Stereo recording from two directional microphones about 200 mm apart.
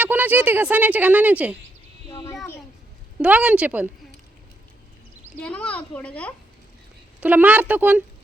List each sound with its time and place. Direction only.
0.0 s a woman's voice: 10° right (ahead or behind)
2.1 s child singing: 15° left (ahead or behind)
3.2 s a woman's voice: 5° right (ahead or behind)
5.4 s a child's voice: 5° left (ahead or behind)
7.2 s a woman's voice: 10° right (ahead or behind)